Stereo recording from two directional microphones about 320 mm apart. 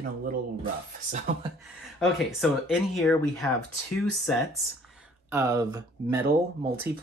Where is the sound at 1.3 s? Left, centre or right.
Right.